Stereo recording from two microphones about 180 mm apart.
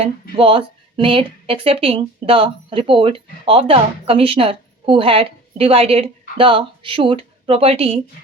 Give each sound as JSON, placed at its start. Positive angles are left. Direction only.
{"t": 0.0, "sound": "a woman's voice", "side_deg": -30}